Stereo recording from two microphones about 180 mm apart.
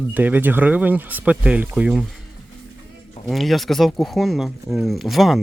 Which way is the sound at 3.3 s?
Centre (ahead or behind).